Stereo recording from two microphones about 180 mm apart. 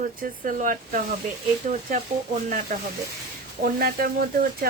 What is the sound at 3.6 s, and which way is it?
Speech, 55° right (ahead or behind).